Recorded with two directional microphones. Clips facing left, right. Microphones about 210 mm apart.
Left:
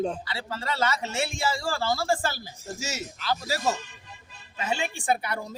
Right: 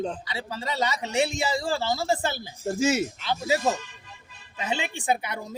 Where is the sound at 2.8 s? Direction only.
55° right (ahead or behind).